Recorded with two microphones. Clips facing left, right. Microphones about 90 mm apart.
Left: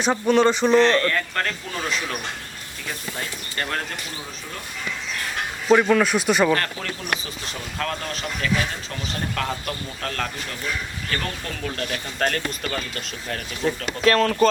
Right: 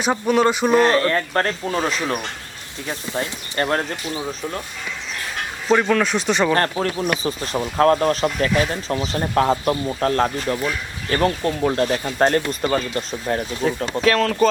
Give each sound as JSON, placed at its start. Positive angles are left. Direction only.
{"t": 0.0, "sound": "a sound", "side_deg": -5}
{"t": 0.9, "sound": "speech", "side_deg": -30}
{"t": 3.2, "sound": "speech", "side_deg": -25}
{"t": 5.6, "sound": "speech", "side_deg": 0}
{"t": 6.5, "sound": "speech", "side_deg": -35}
{"t": 14.0, "sound": "speech", "side_deg": 0}